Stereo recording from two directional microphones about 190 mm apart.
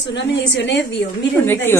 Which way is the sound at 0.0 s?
70° left (ahead or behind).